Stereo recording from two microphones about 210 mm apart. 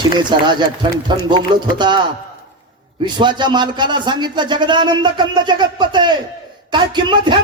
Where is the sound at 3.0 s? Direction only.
20° right (ahead or behind).